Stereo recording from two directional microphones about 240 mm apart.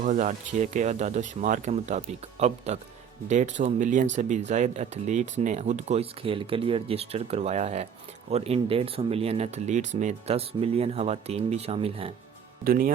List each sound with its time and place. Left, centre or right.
0.0 s speech: right
12.6 s speech: right